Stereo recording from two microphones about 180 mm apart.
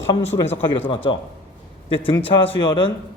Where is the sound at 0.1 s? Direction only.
30° left (ahead or behind).